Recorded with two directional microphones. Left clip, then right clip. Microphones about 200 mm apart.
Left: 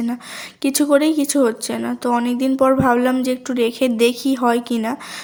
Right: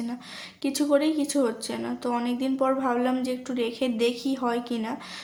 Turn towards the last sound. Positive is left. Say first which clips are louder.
# left 10 dB
turn(degrees=40)  # may be behind; listen again after turning